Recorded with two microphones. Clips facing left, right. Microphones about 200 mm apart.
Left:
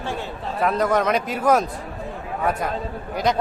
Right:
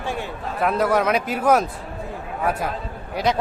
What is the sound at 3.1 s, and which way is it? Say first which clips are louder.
Speech: even; centre (ahead or behind).